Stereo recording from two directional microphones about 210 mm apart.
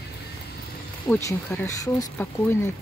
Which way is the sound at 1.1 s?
5° left (ahead or behind).